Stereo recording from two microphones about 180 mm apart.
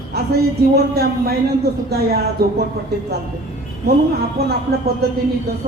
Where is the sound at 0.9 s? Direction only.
60° right (ahead or behind).